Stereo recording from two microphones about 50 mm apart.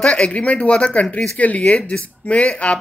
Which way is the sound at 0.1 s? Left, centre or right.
Left.